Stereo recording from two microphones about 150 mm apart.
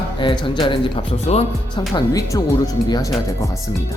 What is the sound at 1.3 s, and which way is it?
Speech, 50° left (ahead or behind).